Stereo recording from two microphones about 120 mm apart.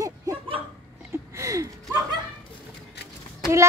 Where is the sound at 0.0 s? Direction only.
25° right (ahead or behind).